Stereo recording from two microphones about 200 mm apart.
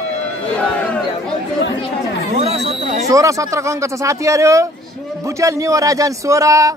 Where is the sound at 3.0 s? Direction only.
15° right (ahead or behind).